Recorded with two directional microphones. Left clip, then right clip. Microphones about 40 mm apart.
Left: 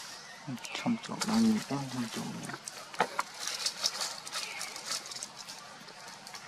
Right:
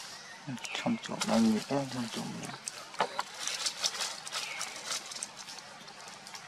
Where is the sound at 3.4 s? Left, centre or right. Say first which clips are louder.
Right 2 dB; right.